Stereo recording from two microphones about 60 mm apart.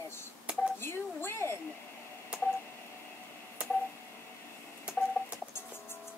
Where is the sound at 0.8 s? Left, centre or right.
Left.